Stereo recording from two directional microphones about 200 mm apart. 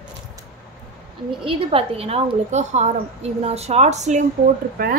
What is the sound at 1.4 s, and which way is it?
A woman's voice, 25° right (ahead or behind).